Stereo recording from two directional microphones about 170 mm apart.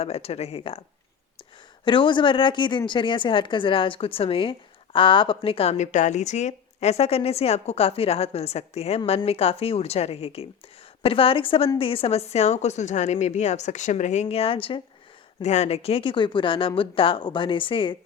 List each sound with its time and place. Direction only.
0.0 s a woman's voice: 35° left (ahead or behind)
1.8 s a woman's voice: 30° left (ahead or behind)